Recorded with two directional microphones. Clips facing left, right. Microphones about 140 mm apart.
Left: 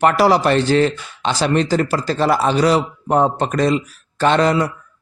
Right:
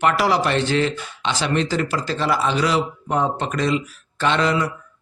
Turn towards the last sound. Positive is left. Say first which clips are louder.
# left 5 dB
turn(degrees=40)  # may be behind; listen again after turning